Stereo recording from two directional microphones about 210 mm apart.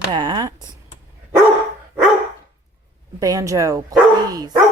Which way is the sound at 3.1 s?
15° right (ahead or behind).